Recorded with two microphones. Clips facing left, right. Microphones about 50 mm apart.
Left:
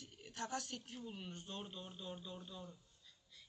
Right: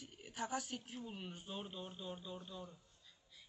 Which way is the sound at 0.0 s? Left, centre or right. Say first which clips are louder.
Right 2 dB; centre.